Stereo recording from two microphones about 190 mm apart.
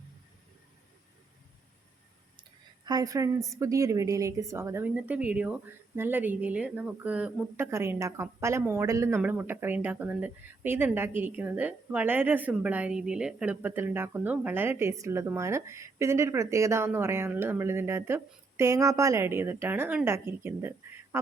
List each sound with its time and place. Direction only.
2.8 s a woman's voice: 20° right (ahead or behind)